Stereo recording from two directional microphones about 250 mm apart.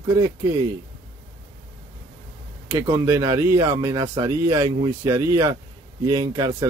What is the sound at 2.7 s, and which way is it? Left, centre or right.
Speech, centre.